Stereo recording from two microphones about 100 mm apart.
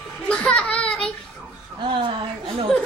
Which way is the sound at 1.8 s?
60° right (ahead or behind).